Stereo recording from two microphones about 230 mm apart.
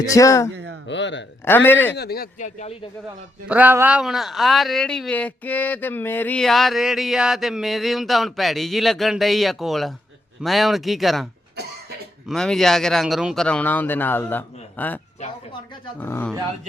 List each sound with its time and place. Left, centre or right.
0.0 s a man's voice: centre
0.5 s a sound: right
0.9 s speech: left
1.5 s a man's voice: centre
2.0 s speech: left
3.5 s speech: centre
12.3 s a man's voice: centre